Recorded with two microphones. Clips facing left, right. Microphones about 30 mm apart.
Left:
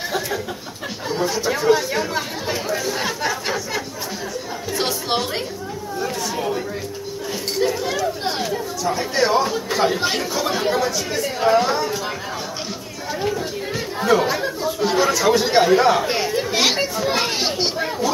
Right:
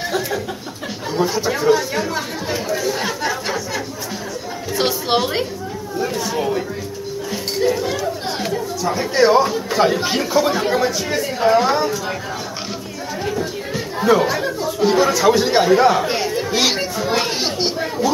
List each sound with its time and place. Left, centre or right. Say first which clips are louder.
1.2 s chatter: right 2 dB; centre
4.7 s chatter: right 4 dB; centre
5.9 s speech: right 4 dB; centre
7.5 s chatter: right 2 dB; centre
8.5 s speech: right 2 dB; centre
10.8 s speech: right 3 dB; centre
11.2 s speech: right 2 dB; centre
13.3 s chatter: right 1 dB; centre
14.2 s speech: right 2 dB; centre